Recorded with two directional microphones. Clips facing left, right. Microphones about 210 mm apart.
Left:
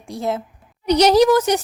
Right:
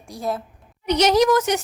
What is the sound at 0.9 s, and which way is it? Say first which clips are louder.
Speech: left 4 dB; 35° left (ahead or behind).